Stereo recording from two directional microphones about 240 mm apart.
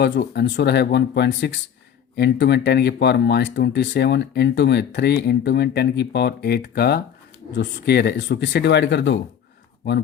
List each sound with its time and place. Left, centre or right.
0.0 s speech: left